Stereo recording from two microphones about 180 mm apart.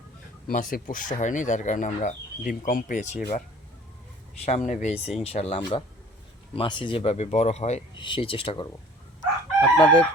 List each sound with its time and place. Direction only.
0.4 s speech: 50° left (ahead or behind)
4.4 s speech: 40° left (ahead or behind)
9.7 s speech: 30° left (ahead or behind)